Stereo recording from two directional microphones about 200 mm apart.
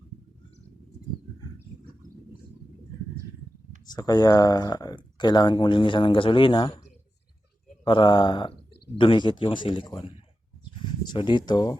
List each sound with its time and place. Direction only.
3.8 s speech: 20° left (ahead or behind)
7.9 s speech: 25° left (ahead or behind)
11.1 s speech: 20° left (ahead or behind)